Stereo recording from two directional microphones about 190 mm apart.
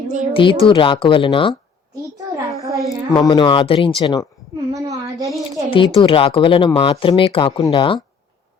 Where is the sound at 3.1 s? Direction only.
20° left (ahead or behind).